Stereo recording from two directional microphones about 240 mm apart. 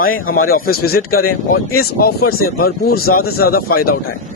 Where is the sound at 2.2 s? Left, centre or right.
Left.